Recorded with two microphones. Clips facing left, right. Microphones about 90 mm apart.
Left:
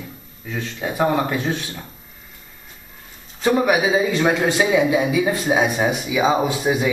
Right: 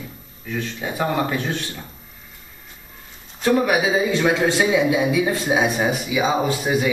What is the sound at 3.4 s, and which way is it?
Speech, 15° left (ahead or behind).